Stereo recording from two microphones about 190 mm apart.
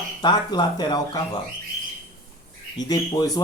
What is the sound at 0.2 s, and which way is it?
Speech, 20° left (ahead or behind).